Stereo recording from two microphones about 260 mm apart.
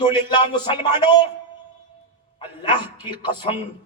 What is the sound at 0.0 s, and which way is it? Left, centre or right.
A man's voice, centre.